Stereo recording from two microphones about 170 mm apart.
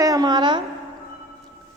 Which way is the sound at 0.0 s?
25° right (ahead or behind).